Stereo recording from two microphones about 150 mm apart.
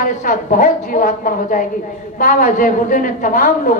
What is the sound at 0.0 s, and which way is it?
A woman's voice, 60° left (ahead or behind).